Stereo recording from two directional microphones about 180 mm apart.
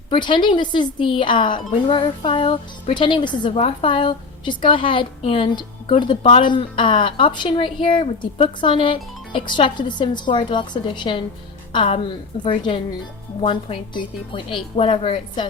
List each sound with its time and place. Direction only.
0.1 s a woman's voice: 25° left (ahead or behind)